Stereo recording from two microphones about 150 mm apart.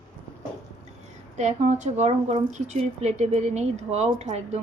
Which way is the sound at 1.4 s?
50° right (ahead or behind).